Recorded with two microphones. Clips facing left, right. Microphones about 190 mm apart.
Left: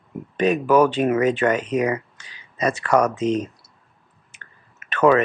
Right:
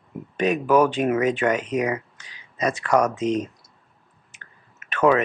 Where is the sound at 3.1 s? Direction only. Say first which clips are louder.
Left 2 dB; 35° left (ahead or behind).